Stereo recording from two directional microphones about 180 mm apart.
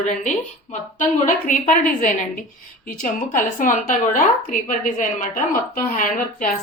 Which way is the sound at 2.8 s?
50° left (ahead or behind).